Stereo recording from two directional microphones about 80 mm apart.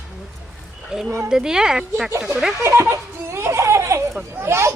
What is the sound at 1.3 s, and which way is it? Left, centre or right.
A woman's voice, centre.